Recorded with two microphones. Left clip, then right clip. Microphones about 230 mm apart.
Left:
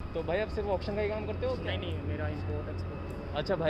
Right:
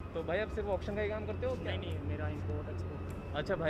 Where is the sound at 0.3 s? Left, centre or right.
Centre.